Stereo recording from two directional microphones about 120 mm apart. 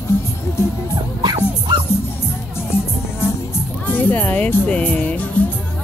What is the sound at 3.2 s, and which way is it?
Music, 20° left (ahead or behind).